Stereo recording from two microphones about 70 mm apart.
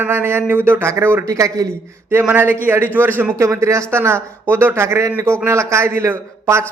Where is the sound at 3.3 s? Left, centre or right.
Right.